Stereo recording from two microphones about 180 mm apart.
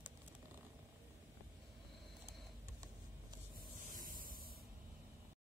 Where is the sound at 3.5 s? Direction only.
50° right (ahead or behind).